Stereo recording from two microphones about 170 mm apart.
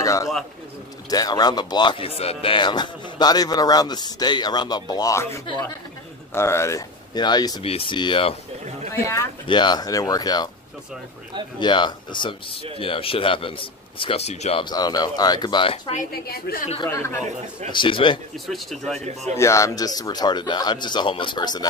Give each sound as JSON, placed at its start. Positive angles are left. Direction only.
{"t": 0.0, "sound": "bird", "side_deg": 20}
{"t": 1.1, "sound": "a man's voice", "side_deg": 25}
{"t": 8.9, "sound": "speech", "side_deg": 15}
{"t": 11.6, "sound": "a man's voice", "side_deg": 25}
{"t": 14.6, "sound": "speech", "side_deg": 25}
{"t": 16.1, "sound": "a woman's voice", "side_deg": 65}
{"t": 16.9, "sound": "speech", "side_deg": 15}
{"t": 17.6, "sound": "speech", "side_deg": 30}
{"t": 18.3, "sound": "speech", "side_deg": 0}
{"t": 19.3, "sound": "speech", "side_deg": 20}